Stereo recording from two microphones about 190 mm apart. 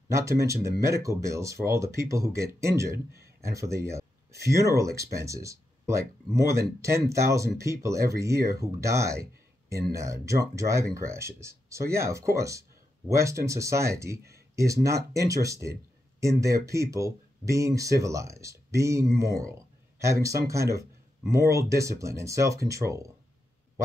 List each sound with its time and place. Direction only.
0.1 s speech: 15° right (ahead or behind)